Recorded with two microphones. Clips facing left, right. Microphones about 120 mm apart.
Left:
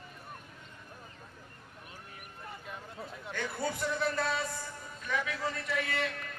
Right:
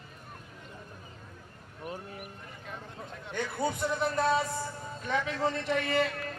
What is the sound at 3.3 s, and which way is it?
A man's voice, 20° right (ahead or behind).